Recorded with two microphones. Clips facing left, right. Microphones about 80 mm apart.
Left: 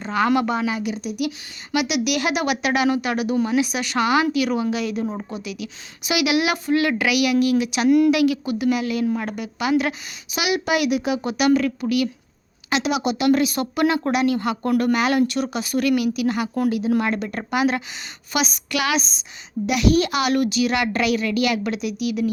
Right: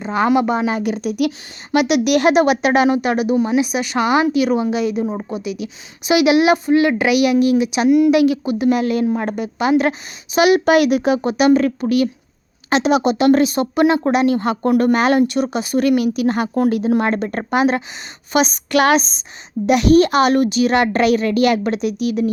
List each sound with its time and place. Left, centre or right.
0.1 s speech: right
0.7 s speech: right
7.9 s speech: centre
8.1 s speech: right
11.2 s speech: right
14.7 s speech: right
14.9 s speech: right
15.3 s speech: right